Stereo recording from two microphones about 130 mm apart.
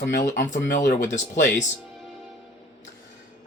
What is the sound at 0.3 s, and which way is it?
Speech, 90° left.